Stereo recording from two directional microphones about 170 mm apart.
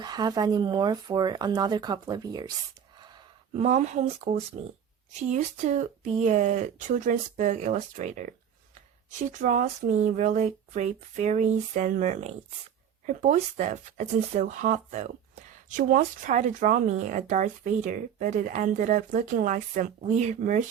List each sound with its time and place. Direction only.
0.0 s speech: 25° right (ahead or behind)
3.0 s a sound: 25° right (ahead or behind)
3.6 s speech: 40° right (ahead or behind)